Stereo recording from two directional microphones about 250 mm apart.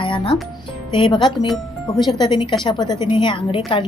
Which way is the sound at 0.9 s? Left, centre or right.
Centre.